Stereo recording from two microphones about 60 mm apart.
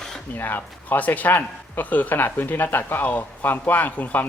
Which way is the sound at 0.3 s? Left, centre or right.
Left.